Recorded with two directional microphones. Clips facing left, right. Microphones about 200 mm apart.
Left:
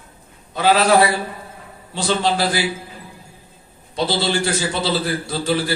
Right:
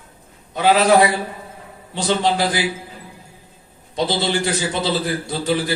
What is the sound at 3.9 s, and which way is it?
A man's voice, 20° right (ahead or behind).